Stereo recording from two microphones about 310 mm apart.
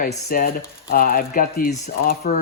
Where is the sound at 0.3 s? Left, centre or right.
Left.